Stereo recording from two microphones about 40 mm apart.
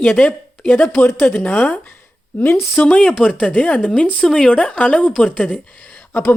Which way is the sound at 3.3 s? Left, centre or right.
Left.